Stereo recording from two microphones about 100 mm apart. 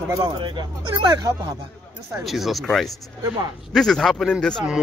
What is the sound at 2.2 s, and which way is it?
A man's voice, centre (ahead or behind).